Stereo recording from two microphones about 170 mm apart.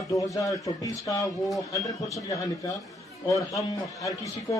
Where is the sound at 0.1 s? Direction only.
20° left (ahead or behind).